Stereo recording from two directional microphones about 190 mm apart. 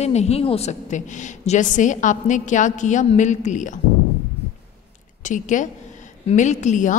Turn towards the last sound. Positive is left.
turn(degrees=40)  # may be behind; listen again after turning